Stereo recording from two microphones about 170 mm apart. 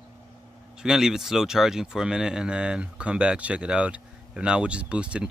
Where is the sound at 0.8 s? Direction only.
5° right (ahead or behind).